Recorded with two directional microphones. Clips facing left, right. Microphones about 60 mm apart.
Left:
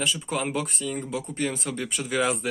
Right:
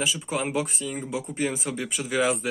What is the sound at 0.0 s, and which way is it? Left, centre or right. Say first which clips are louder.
A man's voice: even; centre.